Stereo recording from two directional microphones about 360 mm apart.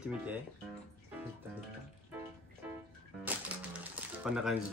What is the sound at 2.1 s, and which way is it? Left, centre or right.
Music, centre.